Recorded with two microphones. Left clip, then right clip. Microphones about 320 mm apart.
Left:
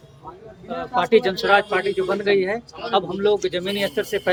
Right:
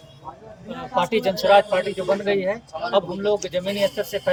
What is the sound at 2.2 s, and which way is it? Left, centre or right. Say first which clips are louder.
Speech: left 3 dB; centre.